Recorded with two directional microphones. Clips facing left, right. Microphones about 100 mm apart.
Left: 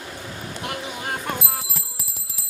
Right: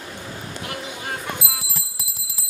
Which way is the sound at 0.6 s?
30° left (ahead or behind).